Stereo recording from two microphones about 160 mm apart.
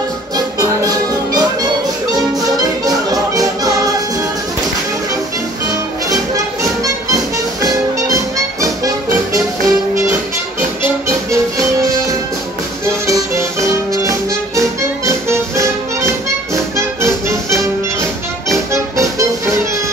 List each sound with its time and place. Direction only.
0.6 s music: 20° right (ahead or behind)
5.7 s music: 20° right (ahead or behind)
11.2 s music: 20° right (ahead or behind)